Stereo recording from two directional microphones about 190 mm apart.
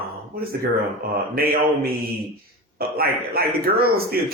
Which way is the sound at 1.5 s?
50° right (ahead or behind).